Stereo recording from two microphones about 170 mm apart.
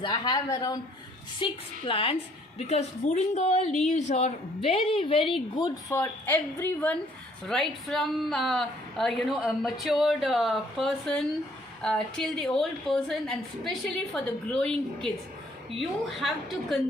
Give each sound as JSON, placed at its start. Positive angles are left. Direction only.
{"t": 0.0, "sound": "speech", "side_deg": 25}
{"t": 1.4, "sound": "a woman's voice", "side_deg": 30}
{"t": 5.9, "sound": "a woman's voice", "side_deg": 15}